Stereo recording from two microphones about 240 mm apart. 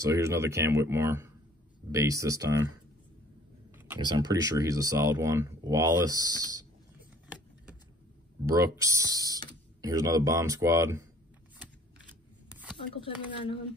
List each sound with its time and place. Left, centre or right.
0.0 s speech: centre
3.7 s speech: centre
8.7 s speech: centre
12.9 s speech: left